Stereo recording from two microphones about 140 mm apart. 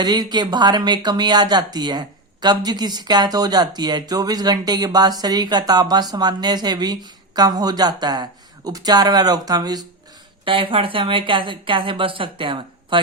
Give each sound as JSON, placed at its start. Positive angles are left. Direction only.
{"t": 0.0, "sound": "speech", "side_deg": -30}